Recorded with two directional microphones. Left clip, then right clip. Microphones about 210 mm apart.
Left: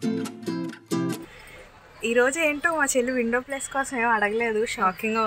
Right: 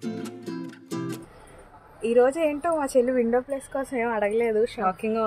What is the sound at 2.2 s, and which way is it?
A woman's voice, 25° left (ahead or behind).